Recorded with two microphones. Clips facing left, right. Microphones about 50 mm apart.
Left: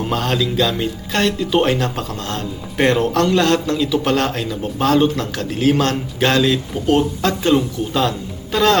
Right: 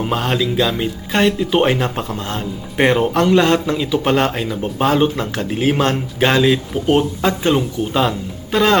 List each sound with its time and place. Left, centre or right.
0.0 s a man's voice: centre